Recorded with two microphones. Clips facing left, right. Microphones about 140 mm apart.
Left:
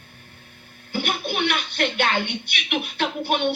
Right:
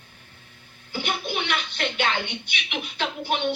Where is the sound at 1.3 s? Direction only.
60° left (ahead or behind).